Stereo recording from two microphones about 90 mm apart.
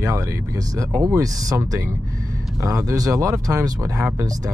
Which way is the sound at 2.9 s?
40° right (ahead or behind).